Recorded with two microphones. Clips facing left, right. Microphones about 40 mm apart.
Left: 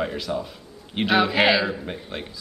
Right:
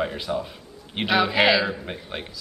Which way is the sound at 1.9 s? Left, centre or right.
Centre.